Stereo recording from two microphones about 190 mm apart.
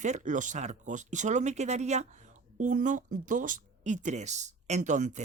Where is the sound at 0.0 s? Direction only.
40° right (ahead or behind).